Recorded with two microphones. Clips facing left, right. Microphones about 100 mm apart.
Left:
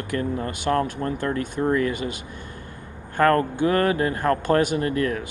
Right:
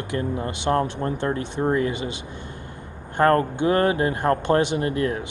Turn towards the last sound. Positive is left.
turn(degrees=-25)  # may be behind; listen again after turning